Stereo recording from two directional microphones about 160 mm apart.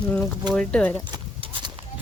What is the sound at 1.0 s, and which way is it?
Clip-clop, 30° right (ahead or behind).